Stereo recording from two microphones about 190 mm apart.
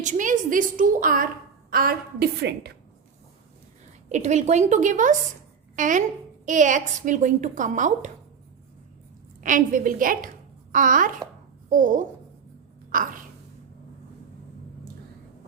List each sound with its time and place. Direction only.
0.0 s a woman's voice: 40° right (ahead or behind); by 2.7 s 60° right (ahead or behind)
4.1 s a woman's voice: 40° right (ahead or behind)
9.4 s a woman's voice: 45° right (ahead or behind)
12.9 s a sound: 45° right (ahead or behind)